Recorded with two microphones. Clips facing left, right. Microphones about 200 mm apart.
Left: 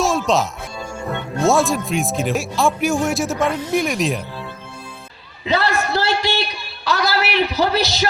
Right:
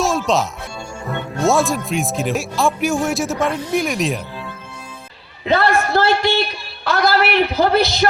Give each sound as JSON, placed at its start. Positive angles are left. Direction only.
{"t": 0.0, "sound": "music", "side_deg": 0}
{"t": 1.4, "sound": "speech", "side_deg": 0}
{"t": 5.5, "sound": "a man's voice", "side_deg": -55}